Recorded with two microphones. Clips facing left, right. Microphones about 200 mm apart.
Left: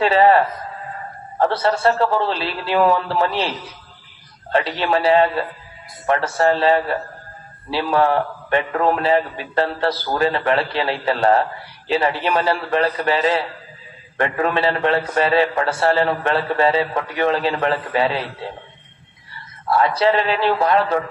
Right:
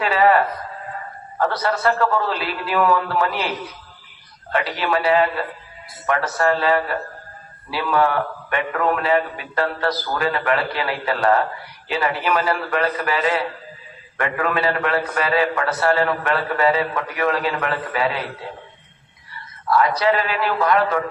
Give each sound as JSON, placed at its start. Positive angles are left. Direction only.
{"t": 0.0, "sound": "a man's voice", "side_deg": 30}
{"t": 4.5, "sound": "a man's voice", "side_deg": 30}
{"t": 19.6, "sound": "a man's voice", "side_deg": 25}